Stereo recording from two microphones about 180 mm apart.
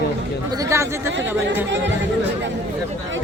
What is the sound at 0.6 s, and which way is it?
Speech, 15° right (ahead or behind).